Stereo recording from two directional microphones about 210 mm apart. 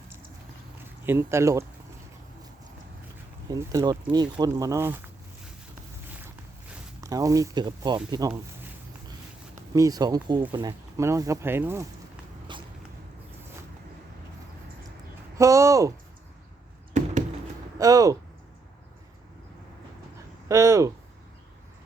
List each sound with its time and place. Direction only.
1.0 s speech: 10° right (ahead or behind)
3.5 s speech: 15° right (ahead or behind)
7.0 s speech: 15° right (ahead or behind)
9.7 s speech: 15° right (ahead or behind)
12.5 s a sound: 20° right (ahead or behind)
15.4 s speech: 15° right (ahead or behind)
17.7 s speech: 15° right (ahead or behind)
20.5 s speech: 15° right (ahead or behind)